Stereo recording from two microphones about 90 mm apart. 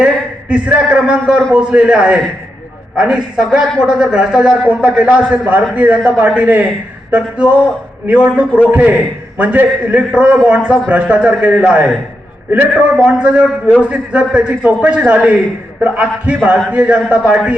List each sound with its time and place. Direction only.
0.0 s a man's voice: 15° right (ahead or behind)